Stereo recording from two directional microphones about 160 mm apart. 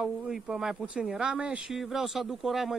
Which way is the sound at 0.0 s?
5° right (ahead or behind).